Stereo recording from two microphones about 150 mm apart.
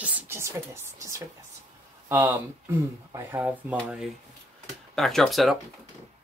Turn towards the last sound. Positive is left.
turn(degrees=0)  # may be behind; listen again after turning